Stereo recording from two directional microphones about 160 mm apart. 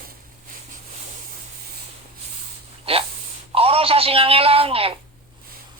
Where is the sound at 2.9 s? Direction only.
40° right (ahead or behind).